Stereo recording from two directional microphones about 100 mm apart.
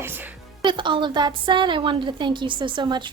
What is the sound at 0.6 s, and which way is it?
A woman's voice, 55° right (ahead or behind).